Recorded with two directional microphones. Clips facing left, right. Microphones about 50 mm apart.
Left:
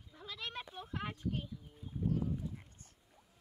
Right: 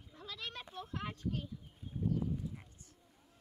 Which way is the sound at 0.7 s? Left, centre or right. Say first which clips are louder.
Even; centre.